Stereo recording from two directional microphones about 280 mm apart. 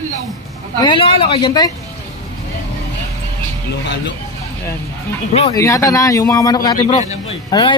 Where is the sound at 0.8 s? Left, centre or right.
Centre.